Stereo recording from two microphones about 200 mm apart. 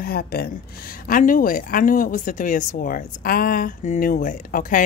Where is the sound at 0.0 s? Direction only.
50° left (ahead or behind).